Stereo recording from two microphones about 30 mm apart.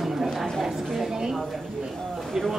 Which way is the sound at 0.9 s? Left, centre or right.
Centre.